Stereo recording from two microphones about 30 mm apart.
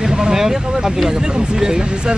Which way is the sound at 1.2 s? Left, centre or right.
Right.